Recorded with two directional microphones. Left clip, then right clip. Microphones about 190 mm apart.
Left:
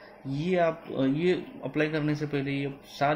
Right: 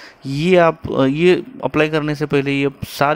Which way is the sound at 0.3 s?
35° right (ahead or behind).